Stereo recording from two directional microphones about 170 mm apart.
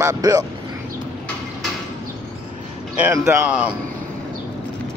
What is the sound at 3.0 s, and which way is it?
Speech, 15° right (ahead or behind).